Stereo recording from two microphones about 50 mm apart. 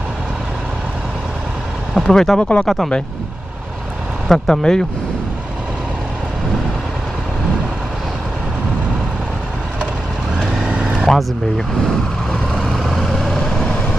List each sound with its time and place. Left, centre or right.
2.0 s speech: centre
2.6 s speech: centre
4.3 s speech: centre
10.7 s vehicle: centre
11.1 s speech: centre
12.6 s vehicle: centre